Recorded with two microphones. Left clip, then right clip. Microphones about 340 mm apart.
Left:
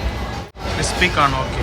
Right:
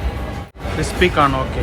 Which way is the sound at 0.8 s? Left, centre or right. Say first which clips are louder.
Right 1 dB; centre.